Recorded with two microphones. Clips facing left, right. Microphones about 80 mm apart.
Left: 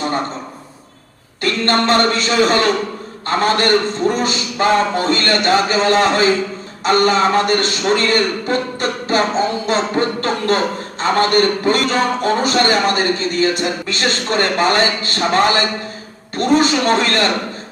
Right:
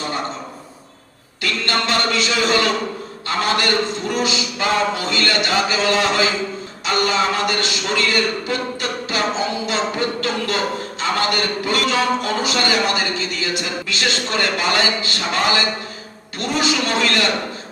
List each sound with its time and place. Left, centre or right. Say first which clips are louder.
1.4 s a man's voice: left 5 dB; left